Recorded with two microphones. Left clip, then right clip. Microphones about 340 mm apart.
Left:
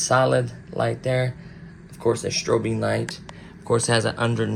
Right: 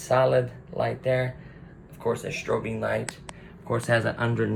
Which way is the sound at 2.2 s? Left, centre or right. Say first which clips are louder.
Left 5 dB; centre.